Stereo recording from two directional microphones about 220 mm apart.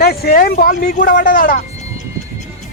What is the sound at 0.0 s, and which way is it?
Speech, 45° left (ahead or behind).